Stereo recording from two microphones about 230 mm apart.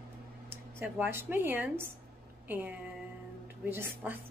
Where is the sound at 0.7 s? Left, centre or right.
Centre.